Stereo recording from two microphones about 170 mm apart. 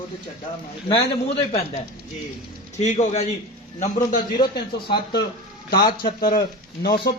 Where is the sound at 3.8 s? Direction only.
50° left (ahead or behind).